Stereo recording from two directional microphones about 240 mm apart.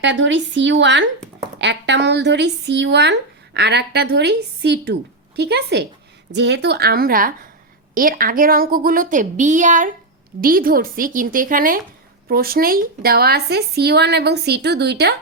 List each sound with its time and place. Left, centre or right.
0.0 s speech: right